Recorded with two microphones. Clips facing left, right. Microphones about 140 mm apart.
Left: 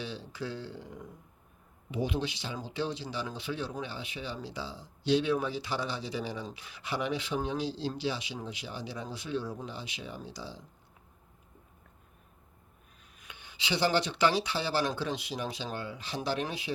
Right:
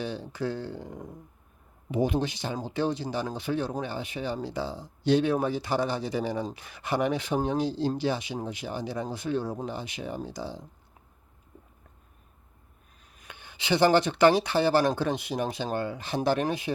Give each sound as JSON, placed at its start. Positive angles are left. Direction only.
{"t": 0.0, "sound": "speech", "side_deg": -50}
{"t": 13.1, "sound": "speech", "side_deg": -50}